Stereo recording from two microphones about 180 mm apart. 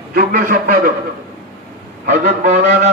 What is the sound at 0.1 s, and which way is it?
Speech, 55° right (ahead or behind).